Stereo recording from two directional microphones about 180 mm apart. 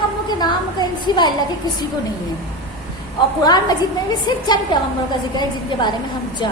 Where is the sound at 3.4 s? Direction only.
20° left (ahead or behind).